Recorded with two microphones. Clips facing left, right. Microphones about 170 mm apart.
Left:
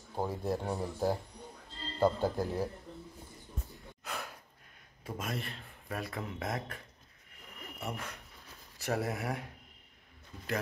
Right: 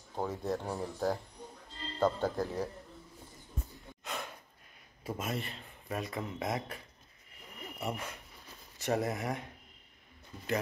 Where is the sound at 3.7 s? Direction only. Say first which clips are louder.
Even; centre (ahead or behind).